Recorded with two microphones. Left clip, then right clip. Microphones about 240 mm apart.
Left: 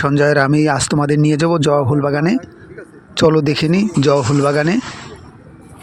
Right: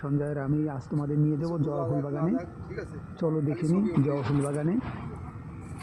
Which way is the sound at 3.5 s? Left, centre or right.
Left.